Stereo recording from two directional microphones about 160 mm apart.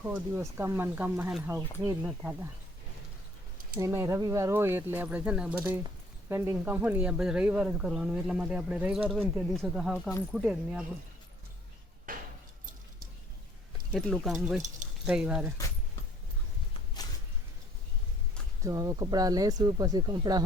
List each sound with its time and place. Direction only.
0.0 s speech: 15° right (ahead or behind)
3.8 s speech: 20° right (ahead or behind)
12.1 s a sound: 60° right (ahead or behind)
13.9 s speech: centre (ahead or behind)
18.6 s speech: 20° right (ahead or behind)